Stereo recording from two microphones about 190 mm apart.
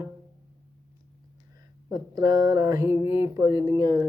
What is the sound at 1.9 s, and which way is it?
A woman's voice, 20° right (ahead or behind).